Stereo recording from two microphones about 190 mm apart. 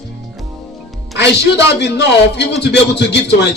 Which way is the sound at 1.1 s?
65° left (ahead or behind).